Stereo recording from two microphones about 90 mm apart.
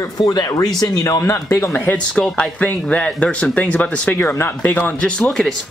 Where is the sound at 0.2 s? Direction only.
45° left (ahead or behind); by 1.7 s 30° left (ahead or behind).